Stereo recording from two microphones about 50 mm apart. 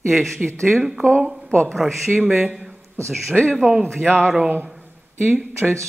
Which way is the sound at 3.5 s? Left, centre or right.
Right.